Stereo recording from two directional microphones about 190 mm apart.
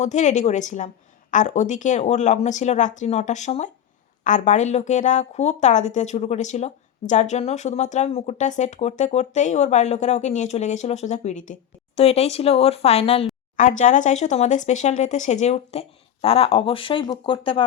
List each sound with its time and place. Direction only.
0.0 s speech: 40° left (ahead or behind)
13.6 s speech: 40° left (ahead or behind); by 17.6 s 25° left (ahead or behind)